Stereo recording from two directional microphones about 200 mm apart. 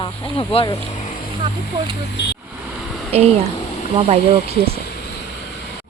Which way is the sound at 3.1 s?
30° right (ahead or behind).